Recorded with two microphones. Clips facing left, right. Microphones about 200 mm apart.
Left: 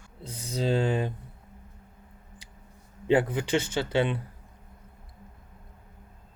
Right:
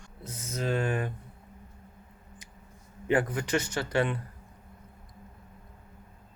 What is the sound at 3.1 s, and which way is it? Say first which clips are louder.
Speech: left 3 dB; 25° left (ahead or behind).